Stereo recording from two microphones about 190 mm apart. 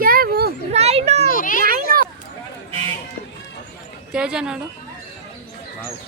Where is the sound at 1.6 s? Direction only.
50° right (ahead or behind).